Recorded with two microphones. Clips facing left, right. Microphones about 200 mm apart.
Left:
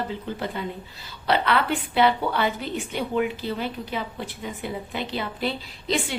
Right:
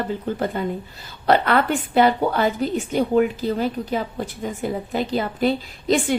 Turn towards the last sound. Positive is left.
turn(degrees=-45)  # may be behind; listen again after turning